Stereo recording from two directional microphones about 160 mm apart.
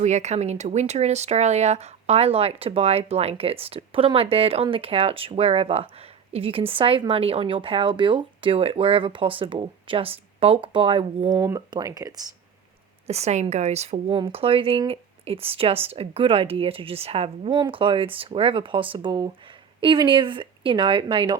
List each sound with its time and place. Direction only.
0.0 s speech: 45° right (ahead or behind)
11.3 s speech: 20° right (ahead or behind)
13.1 s a woman's voice: 45° right (ahead or behind)